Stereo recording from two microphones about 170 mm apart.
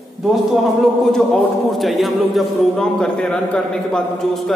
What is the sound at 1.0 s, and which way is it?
A man's voice, centre (ahead or behind).